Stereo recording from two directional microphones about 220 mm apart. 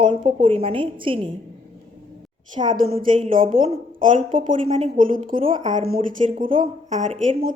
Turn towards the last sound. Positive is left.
turn(degrees=-35)  # may be behind; listen again after turning